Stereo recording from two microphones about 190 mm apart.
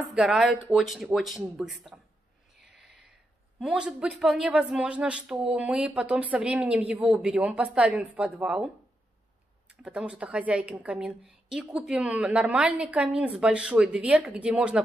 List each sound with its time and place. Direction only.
0.1 s speech: 5° right (ahead or behind)
3.5 s speech: 5° right (ahead or behind)
9.8 s speech: 5° right (ahead or behind)